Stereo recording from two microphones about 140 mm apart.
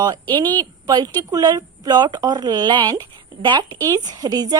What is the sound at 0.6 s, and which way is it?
Speech, 30° right (ahead or behind).